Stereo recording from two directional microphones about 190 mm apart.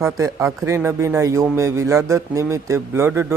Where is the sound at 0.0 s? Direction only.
15° right (ahead or behind).